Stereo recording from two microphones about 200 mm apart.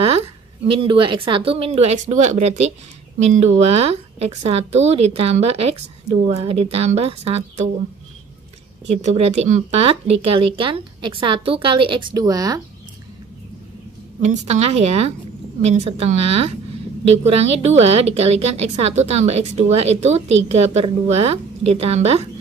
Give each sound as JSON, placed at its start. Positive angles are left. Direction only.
{"t": 0.7, "sound": "a woman's voice", "side_deg": -25}
{"t": 9.0, "sound": "a woman's voice", "side_deg": -30}
{"t": 14.2, "sound": "a woman's voice", "side_deg": -35}